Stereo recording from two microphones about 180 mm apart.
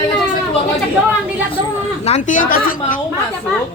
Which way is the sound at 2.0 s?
40° left (ahead or behind).